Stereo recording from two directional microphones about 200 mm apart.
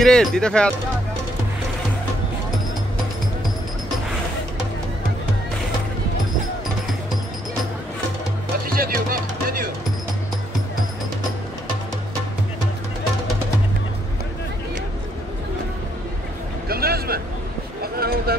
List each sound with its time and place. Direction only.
0.0 s speech: centre (ahead or behind)
8.7 s music: 45° right (ahead or behind)
16.6 s a sound: 50° right (ahead or behind)
17.9 s vehicle: 50° right (ahead or behind)